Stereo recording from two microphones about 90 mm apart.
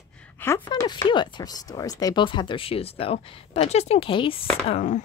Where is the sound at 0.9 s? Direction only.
55° left (ahead or behind); by 2.2 s 40° left (ahead or behind).